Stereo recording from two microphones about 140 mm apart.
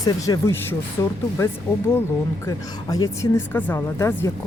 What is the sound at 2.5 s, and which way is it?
Speech, 25° left (ahead or behind).